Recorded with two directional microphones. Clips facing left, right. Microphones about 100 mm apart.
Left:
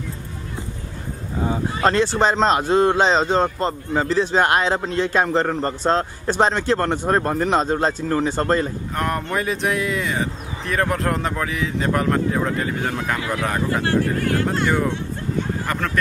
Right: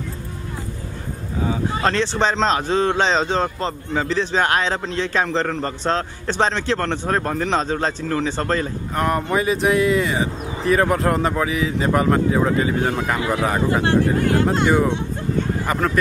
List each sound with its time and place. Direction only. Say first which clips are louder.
1.4 s a man's voice: left 1 dB; centre (ahead or behind)
13.8 s speech: right 2 dB; 20° right (ahead or behind)